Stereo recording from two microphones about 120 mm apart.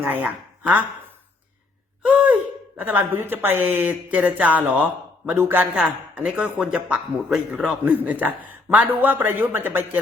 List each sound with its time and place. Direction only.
0.0 s speech: 15° right (ahead or behind)
2.0 s speech: 10° right (ahead or behind)